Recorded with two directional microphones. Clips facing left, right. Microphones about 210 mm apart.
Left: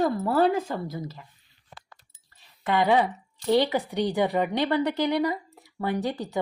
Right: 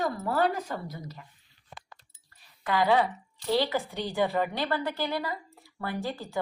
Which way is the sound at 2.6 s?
20° left (ahead or behind).